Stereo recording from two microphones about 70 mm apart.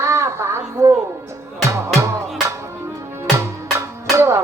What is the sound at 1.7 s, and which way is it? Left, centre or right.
Music, right.